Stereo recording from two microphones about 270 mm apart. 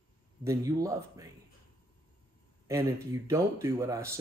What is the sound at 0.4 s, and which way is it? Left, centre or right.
Speech, centre.